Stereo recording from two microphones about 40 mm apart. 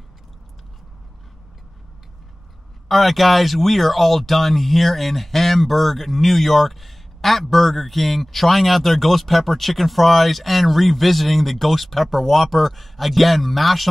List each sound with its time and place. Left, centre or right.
2.9 s a man's voice: centre